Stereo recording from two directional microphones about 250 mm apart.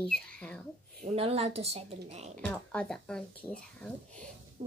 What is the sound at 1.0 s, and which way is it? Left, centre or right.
Child singing, right.